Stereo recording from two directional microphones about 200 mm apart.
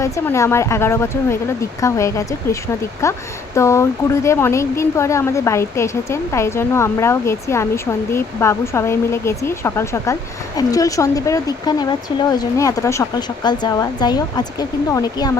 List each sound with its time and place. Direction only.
0.0 s speech: 15° left (ahead or behind)